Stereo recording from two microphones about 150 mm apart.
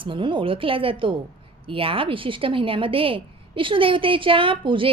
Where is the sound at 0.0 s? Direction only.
35° right (ahead or behind).